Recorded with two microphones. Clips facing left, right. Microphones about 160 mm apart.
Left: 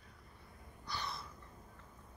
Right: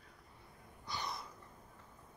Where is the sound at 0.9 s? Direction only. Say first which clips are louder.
Right 1 dB; 15° right (ahead or behind).